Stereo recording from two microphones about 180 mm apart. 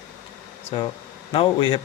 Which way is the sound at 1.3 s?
30° left (ahead or behind).